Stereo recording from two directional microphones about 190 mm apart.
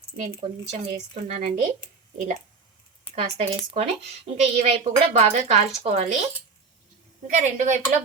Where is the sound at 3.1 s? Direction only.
30° left (ahead or behind).